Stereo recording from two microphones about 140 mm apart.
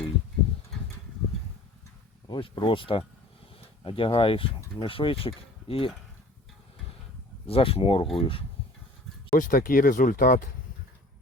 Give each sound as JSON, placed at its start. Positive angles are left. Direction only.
{"t": 2.2, "sound": "speech", "side_deg": 35}
{"t": 7.4, "sound": "speech", "side_deg": 45}
{"t": 9.3, "sound": "speech", "side_deg": 75}